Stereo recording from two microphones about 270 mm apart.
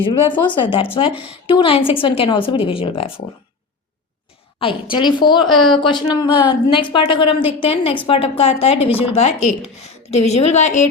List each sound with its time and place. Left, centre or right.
0.0 s a woman's voice: centre
4.6 s a woman's voice: centre